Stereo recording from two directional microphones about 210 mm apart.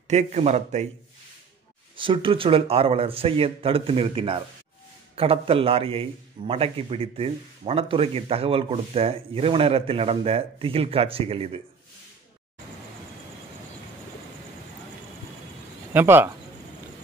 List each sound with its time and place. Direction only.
0.1 s speech: 30° right (ahead or behind)
2.0 s a man's voice: 25° right (ahead or behind)
15.9 s speech: 10° right (ahead or behind)